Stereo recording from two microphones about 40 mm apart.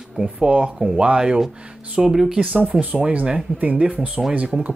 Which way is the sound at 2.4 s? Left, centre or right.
Right.